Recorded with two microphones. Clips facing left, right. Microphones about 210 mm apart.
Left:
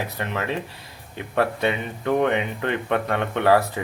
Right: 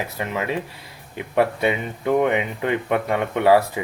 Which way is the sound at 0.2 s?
10° right (ahead or behind).